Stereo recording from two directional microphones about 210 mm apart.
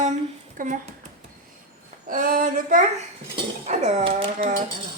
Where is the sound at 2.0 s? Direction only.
40° right (ahead or behind).